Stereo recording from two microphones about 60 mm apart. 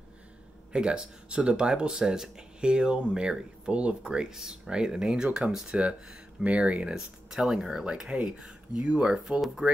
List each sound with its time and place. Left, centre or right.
0.7 s speech: centre